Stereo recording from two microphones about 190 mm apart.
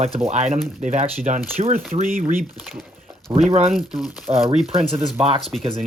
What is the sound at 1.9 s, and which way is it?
Speech, 45° right (ahead or behind).